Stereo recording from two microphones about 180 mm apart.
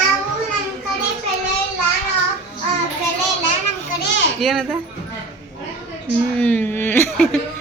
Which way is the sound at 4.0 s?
90° left.